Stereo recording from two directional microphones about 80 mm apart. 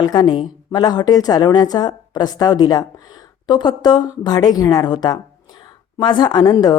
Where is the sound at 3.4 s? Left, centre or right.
Left.